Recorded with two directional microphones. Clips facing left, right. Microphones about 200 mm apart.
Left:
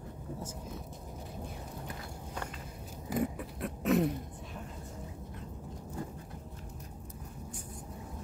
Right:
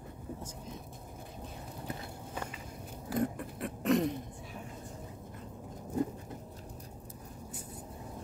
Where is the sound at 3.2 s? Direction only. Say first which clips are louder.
Right 2 dB; centre (ahead or behind).